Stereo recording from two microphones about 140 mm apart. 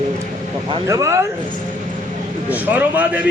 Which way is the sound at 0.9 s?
20° right (ahead or behind).